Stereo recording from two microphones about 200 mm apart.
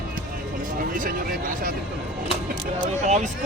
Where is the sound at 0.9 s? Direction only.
45° right (ahead or behind).